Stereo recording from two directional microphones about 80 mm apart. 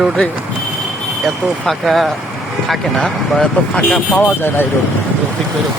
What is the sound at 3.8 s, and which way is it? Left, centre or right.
Speech, centre.